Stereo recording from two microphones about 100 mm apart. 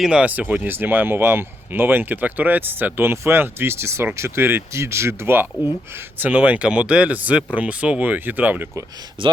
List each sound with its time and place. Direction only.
0.0 s speech: 10° right (ahead or behind)
9.2 s speech: 60° right (ahead or behind)